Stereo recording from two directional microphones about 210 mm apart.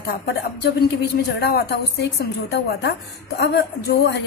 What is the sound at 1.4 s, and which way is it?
A woman's voice, 50° left (ahead or behind).